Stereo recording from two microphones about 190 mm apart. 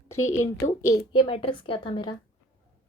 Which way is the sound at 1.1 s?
25° left (ahead or behind).